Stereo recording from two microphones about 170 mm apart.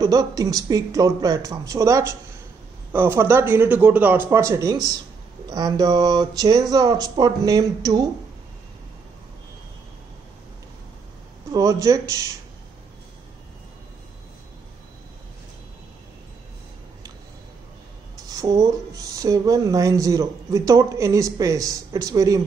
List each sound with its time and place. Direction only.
0.0 s speech: 20° right (ahead or behind)
11.5 s speech: 20° right (ahead or behind)
18.3 s speech: 20° right (ahead or behind)